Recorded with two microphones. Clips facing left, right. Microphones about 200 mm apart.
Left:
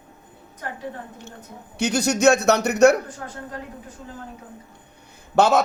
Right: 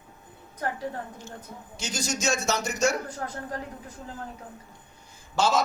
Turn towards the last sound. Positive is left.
turn(degrees=60)  # may be behind; listen again after turning